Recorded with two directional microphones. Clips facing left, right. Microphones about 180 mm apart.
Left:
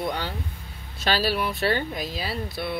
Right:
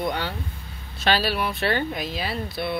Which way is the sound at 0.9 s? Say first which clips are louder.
Right 1 dB; 40° left (ahead or behind).